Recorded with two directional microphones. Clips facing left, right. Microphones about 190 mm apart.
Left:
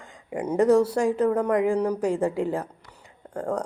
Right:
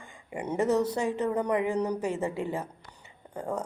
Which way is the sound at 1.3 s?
80° left.